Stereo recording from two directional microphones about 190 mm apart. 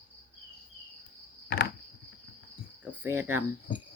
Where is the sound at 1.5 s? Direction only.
65° left (ahead or behind).